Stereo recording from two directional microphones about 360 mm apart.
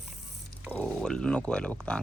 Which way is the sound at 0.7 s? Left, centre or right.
Centre.